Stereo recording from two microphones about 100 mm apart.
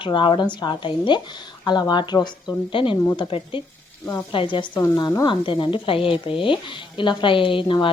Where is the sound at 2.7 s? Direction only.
60° left (ahead or behind).